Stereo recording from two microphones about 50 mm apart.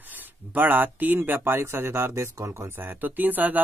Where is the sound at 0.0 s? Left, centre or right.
Right.